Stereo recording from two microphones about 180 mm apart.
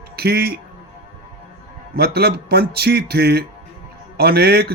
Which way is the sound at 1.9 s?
60° right (ahead or behind).